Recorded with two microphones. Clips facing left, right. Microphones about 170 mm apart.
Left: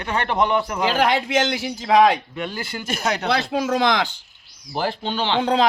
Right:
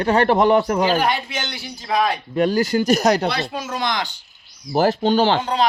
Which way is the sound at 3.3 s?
90° left.